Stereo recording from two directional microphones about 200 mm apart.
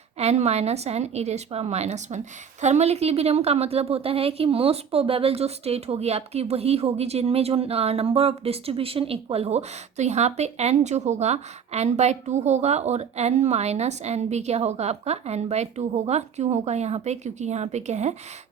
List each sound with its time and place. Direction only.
0.2 s a woman's voice: 30° right (ahead or behind)